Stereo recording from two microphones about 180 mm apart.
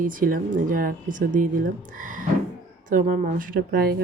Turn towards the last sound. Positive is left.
turn(degrees=-55)  # may be behind; listen again after turning